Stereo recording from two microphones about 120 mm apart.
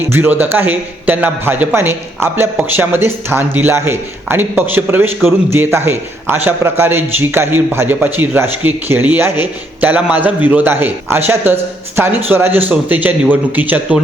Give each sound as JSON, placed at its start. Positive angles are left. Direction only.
{"t": 0.1, "sound": "a man's voice", "side_deg": -15}